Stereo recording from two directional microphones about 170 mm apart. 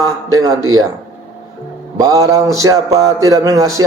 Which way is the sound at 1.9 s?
20° right (ahead or behind).